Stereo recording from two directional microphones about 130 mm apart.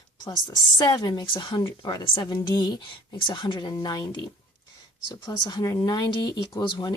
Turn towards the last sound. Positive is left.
turn(degrees=35)  # may be behind; listen again after turning